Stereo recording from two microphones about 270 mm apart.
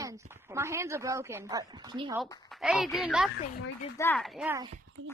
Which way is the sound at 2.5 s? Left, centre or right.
Centre.